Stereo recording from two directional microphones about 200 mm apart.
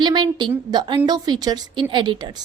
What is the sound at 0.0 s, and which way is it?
A woman's voice, 20° right (ahead or behind).